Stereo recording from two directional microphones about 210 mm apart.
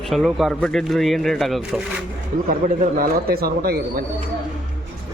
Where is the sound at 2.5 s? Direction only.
40° right (ahead or behind).